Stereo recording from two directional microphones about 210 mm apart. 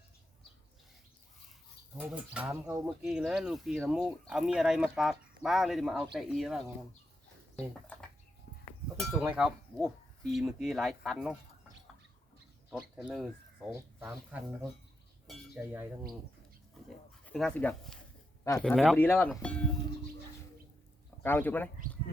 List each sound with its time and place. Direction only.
2.0 s speech: 5° right (ahead or behind)
8.5 s a sound: 50° left (ahead or behind)
9.2 s speech: 5° right (ahead or behind)
12.7 s speech: 5° right (ahead or behind)
15.5 s speech: 10° right (ahead or behind)
16.8 s a sound: centre (ahead or behind)
17.2 s speech: 5° left (ahead or behind)
21.2 s speech: 10° left (ahead or behind)